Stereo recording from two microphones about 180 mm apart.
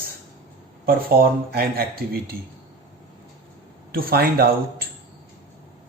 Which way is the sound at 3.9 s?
55° right (ahead or behind).